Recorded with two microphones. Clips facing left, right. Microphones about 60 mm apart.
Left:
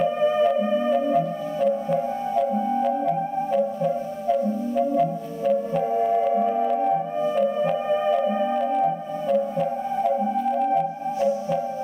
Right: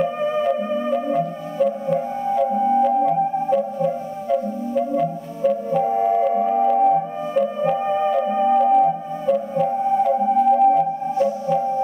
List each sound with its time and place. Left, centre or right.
1.1 s music: centre
2.3 s organ: centre
6.7 s music: centre
7.7 s music: centre
8.1 s music: centre
8.4 s music: centre
10.4 s organ: centre